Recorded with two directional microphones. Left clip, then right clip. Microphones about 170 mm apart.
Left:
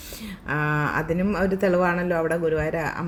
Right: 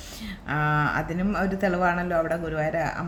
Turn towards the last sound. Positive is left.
turn(degrees=15)  # may be behind; listen again after turning